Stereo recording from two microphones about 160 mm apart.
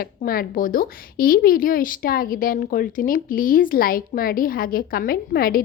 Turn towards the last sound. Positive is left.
turn(degrees=70)  # may be behind; listen again after turning